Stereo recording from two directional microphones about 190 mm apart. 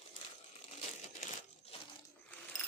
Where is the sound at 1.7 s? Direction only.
30° left (ahead or behind).